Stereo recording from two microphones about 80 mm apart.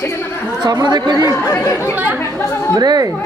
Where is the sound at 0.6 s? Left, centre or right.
Right.